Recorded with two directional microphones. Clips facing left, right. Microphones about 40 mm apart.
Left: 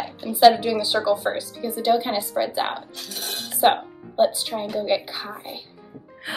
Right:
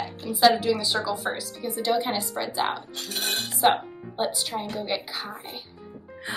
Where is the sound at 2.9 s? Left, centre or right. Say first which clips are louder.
Right 3 dB; right.